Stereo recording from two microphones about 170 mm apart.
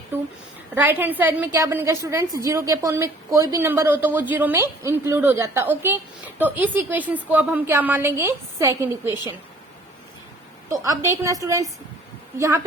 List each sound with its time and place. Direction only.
0.1 s a sound: 10° right (ahead or behind)
0.8 s a woman's voice: 10° right (ahead or behind)
10.7 s a woman's voice: 20° right (ahead or behind)